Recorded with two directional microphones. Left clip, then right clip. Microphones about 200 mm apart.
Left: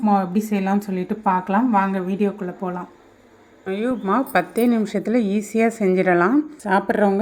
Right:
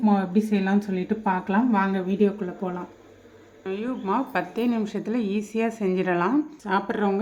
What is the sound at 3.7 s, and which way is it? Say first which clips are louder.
A woman's voice: left 5 dB; 25° left (ahead or behind).